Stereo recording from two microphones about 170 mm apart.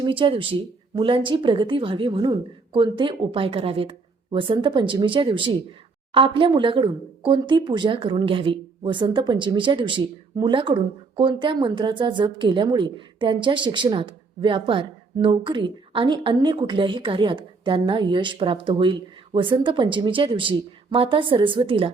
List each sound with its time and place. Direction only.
0.0 s speech: 30° right (ahead or behind)